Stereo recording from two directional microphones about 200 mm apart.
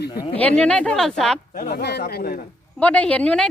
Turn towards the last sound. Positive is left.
turn(degrees=5)  # may be behind; listen again after turning